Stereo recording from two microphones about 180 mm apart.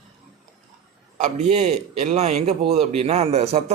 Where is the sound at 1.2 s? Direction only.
40° right (ahead or behind).